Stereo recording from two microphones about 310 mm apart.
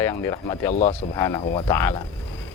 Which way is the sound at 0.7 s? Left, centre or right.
Left.